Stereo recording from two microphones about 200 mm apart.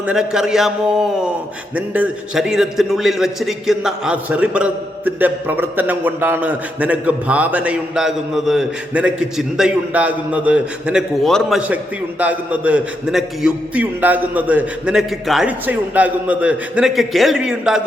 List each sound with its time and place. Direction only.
0.0 s a man's voice: 5° right (ahead or behind)